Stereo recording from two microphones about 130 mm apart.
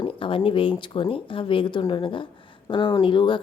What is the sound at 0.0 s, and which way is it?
Speech, 40° left (ahead or behind).